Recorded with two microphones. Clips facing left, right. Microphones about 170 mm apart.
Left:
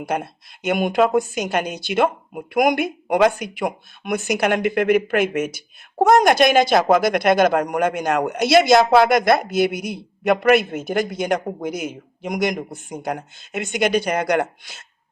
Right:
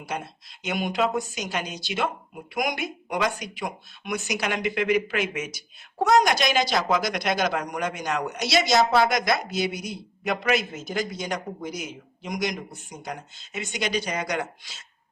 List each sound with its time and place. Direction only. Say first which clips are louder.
0.0 s a woman's voice: left 8 dB; 55° left (ahead or behind)